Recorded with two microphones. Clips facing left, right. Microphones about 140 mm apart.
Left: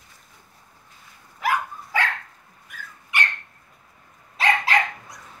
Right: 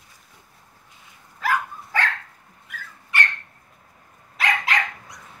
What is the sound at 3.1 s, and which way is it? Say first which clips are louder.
Dog: right 1 dB; 15° left (ahead or behind).